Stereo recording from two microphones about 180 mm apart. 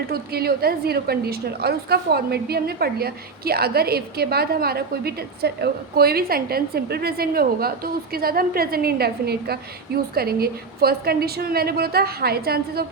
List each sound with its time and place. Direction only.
0.1 s a woman's voice: 60° right (ahead or behind)